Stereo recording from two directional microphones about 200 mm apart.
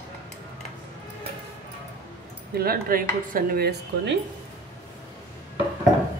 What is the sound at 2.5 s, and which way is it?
Speech, 50° right (ahead or behind).